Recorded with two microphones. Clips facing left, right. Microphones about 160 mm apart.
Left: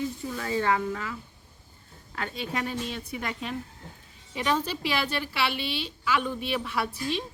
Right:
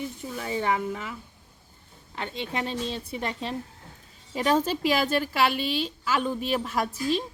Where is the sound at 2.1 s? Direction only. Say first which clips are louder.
Right 1 dB; 25° right (ahead or behind).